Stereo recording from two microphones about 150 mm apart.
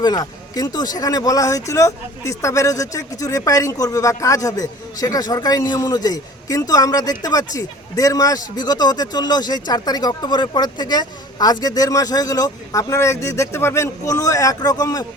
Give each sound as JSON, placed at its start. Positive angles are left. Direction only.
{"t": 0.0, "sound": "speech", "side_deg": 25}